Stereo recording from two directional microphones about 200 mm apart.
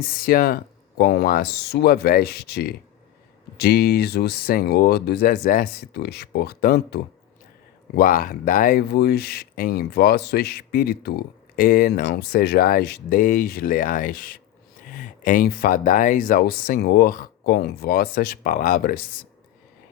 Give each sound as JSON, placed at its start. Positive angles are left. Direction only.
{"t": 0.1, "sound": "speech", "side_deg": 45}